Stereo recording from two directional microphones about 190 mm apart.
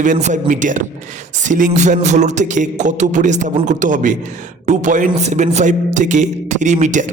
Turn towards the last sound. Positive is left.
turn(degrees=-40)  # may be behind; listen again after turning